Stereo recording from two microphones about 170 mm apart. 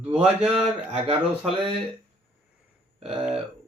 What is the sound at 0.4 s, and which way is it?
Speech, 35° right (ahead or behind).